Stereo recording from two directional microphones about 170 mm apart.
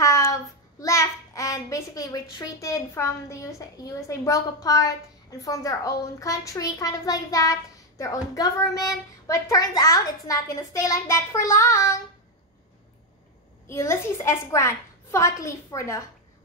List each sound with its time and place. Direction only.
0.0 s a child's voice: 20° left (ahead or behind)
13.7 s a woman's voice: 15° left (ahead or behind)